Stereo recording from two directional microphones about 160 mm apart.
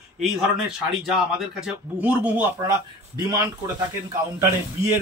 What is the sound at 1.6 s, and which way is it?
Speech, 5° right (ahead or behind).